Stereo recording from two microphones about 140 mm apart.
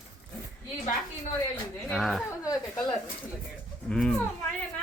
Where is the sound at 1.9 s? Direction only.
Centre (ahead or behind).